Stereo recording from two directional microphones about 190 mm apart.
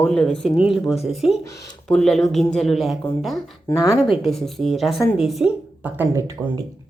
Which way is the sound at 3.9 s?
30° left (ahead or behind).